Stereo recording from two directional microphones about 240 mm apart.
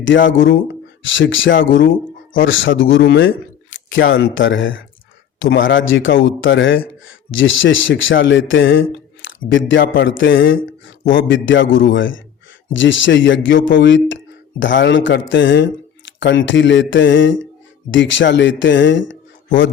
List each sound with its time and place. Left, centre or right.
0.1 s speech: left